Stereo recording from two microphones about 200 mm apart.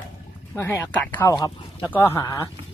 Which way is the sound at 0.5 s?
10° left (ahead or behind).